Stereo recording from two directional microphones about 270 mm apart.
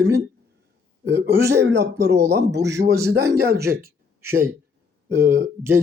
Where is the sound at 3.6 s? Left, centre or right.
Centre.